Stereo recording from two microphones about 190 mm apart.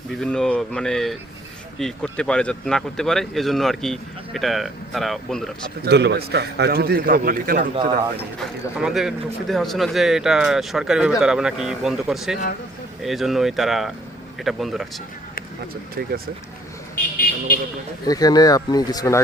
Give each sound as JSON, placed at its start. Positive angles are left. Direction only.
{"t": 0.2, "sound": "speech", "side_deg": 5}
{"t": 5.8, "sound": "a man's voice", "side_deg": -60}
{"t": 8.4, "sound": "speech", "side_deg": 0}
{"t": 15.7, "sound": "a man's voice", "side_deg": -50}
{"t": 18.0, "sound": "speech", "side_deg": 20}